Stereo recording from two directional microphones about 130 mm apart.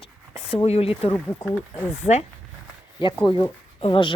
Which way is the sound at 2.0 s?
55° left (ahead or behind).